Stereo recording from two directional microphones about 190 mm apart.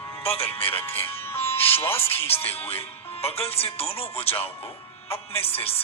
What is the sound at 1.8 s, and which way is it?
Music, 10° left (ahead or behind).